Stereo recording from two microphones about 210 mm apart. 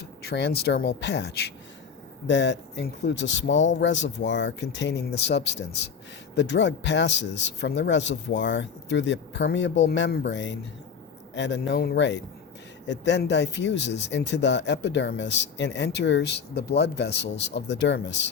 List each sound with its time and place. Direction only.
0.2 s speech: 50° left (ahead or behind)